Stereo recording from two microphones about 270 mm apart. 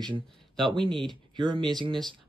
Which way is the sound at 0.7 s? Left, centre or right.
Centre.